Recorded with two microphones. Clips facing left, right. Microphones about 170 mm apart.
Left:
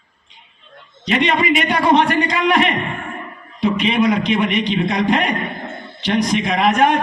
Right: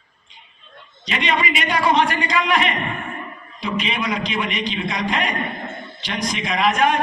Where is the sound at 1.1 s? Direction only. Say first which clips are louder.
Left 6 dB; 55° left (ahead or behind).